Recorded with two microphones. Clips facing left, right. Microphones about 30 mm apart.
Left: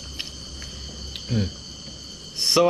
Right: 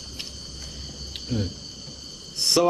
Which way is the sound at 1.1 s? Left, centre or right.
Centre.